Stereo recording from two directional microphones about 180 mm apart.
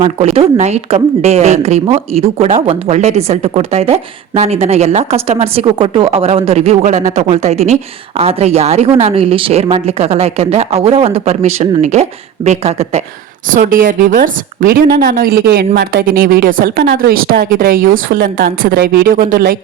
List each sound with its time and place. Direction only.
0.0 s a woman's voice: 35° right (ahead or behind)
13.5 s a woman's voice: 50° right (ahead or behind)